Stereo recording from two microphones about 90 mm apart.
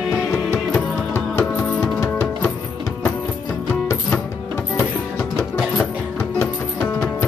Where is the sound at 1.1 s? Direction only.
30° left (ahead or behind).